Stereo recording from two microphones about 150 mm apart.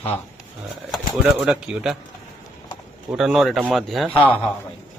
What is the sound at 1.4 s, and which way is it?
Speech, 5° right (ahead or behind).